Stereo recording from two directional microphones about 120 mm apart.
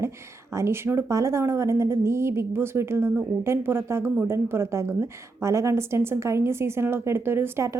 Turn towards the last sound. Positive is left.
turn(degrees=-25)  # may be behind; listen again after turning